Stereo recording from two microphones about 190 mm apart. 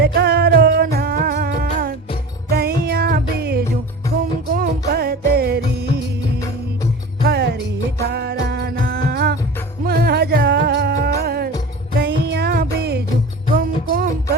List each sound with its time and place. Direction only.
0.0 s music: 60° right (ahead or behind)
7.3 s music: 60° right (ahead or behind)
13.6 s music: 45° right (ahead or behind)